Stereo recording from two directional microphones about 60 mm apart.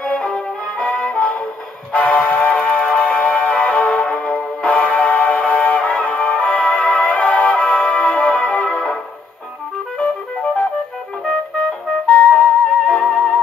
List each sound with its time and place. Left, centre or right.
0.2 s music: centre
0.8 s music: left
12.1 s music: left